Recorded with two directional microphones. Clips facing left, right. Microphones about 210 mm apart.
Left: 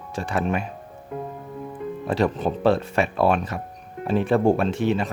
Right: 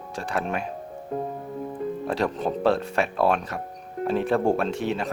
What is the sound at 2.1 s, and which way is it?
Speech, centre (ahead or behind).